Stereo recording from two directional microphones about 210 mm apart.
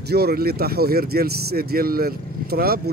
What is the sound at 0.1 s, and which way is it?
Speech, 50° right (ahead or behind).